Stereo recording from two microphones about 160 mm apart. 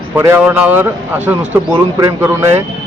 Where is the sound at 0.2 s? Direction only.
15° right (ahead or behind).